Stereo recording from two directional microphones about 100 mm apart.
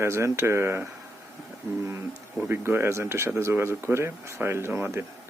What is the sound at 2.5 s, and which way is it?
Speech, 25° right (ahead or behind).